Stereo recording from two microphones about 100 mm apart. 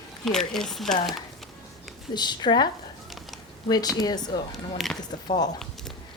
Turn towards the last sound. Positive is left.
turn(degrees=45)  # may be behind; listen again after turning